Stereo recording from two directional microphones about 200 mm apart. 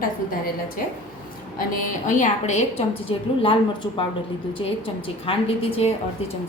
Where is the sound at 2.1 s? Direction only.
40° left (ahead or behind).